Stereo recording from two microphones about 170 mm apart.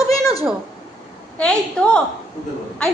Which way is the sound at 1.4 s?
5° left (ahead or behind).